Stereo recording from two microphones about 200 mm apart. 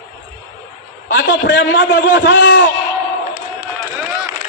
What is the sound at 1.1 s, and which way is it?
A man's voice, 50° left (ahead or behind).